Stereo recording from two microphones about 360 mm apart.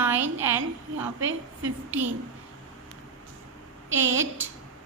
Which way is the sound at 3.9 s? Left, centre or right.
Right.